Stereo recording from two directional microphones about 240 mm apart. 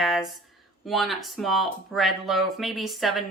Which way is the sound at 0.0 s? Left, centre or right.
Centre.